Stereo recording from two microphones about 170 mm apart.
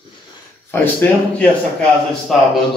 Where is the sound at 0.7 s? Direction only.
10° left (ahead or behind).